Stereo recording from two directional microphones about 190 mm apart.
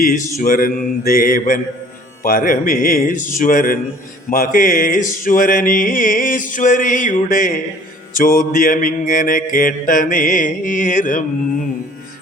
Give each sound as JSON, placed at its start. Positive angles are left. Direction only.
{"t": 0.0, "sound": "music", "side_deg": 45}